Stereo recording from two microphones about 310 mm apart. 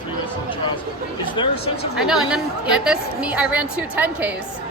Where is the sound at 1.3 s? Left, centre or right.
Centre.